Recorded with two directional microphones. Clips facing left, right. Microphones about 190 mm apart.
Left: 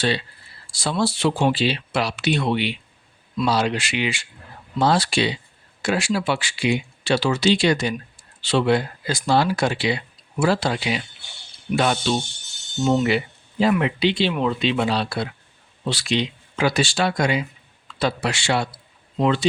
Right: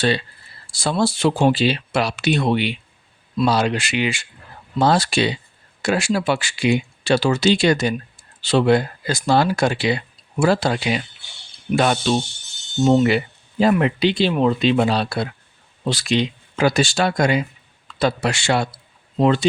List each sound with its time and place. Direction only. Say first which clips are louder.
0.8 s speech: right 3 dB; 45° right (ahead or behind)